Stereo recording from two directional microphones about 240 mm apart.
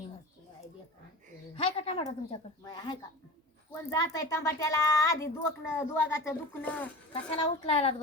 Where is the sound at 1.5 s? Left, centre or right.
Left; by 6.9 s centre.